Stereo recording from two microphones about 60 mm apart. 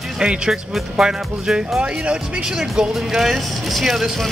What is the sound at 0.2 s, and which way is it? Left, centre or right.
Speech, centre.